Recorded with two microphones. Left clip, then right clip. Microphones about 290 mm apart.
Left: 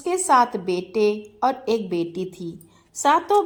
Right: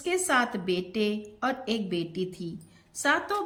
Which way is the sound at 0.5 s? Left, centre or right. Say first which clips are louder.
Left 6 dB; centre.